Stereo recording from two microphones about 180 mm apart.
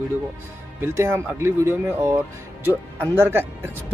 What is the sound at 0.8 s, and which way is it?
Speech, 15° right (ahead or behind).